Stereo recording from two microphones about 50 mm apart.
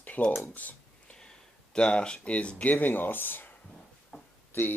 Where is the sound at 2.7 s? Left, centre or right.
Left.